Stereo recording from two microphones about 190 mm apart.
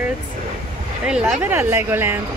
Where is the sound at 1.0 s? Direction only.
5° right (ahead or behind).